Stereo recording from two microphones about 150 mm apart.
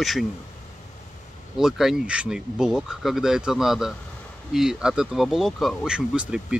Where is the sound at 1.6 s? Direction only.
5° right (ahead or behind).